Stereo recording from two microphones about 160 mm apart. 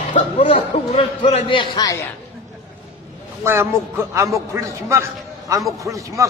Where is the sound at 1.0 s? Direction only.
35° left (ahead or behind).